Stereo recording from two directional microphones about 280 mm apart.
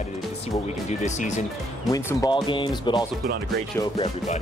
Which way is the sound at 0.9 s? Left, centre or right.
Left.